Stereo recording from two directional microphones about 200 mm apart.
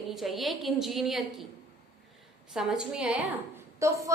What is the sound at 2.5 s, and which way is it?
Speech, centre (ahead or behind).